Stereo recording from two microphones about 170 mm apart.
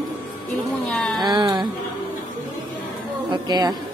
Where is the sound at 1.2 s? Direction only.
25° right (ahead or behind).